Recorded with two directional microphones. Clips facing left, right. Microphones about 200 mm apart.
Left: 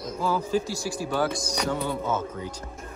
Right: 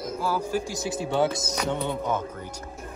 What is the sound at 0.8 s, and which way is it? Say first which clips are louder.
Speech: right 2 dB; 20° right (ahead or behind).